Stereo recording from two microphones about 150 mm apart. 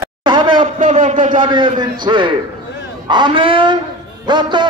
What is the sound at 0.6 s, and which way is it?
Speech, 55° right (ahead or behind).